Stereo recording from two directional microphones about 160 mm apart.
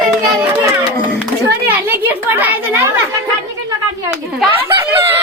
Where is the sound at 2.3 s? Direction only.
10° right (ahead or behind).